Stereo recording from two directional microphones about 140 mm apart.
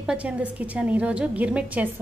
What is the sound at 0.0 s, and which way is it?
A woman's voice, 10° right (ahead or behind).